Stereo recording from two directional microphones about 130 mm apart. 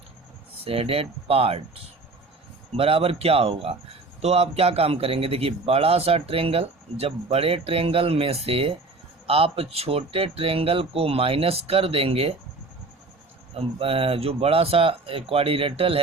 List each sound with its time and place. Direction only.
0.6 s a man's voice: 50° right (ahead or behind)
13.5 s a man's voice: 50° right (ahead or behind)